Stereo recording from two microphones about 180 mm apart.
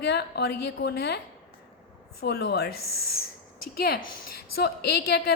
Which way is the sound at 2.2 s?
65° left (ahead or behind).